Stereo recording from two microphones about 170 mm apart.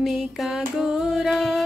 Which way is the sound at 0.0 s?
Centre (ahead or behind).